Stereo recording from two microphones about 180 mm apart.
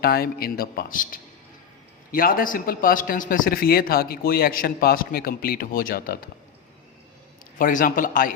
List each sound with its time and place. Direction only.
0.0 s speech: 60° left (ahead or behind)
7.6 s speech: 45° left (ahead or behind)